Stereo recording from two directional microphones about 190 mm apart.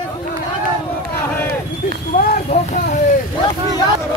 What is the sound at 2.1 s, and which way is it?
Vehicle, 45° left (ahead or behind).